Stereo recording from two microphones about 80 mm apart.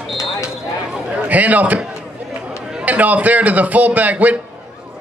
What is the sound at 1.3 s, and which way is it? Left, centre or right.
Speech, centre.